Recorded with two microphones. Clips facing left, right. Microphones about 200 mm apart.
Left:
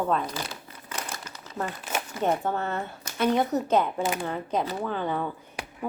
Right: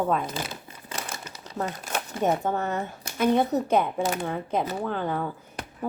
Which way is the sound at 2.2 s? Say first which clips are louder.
Right 2 dB; 10° right (ahead or behind).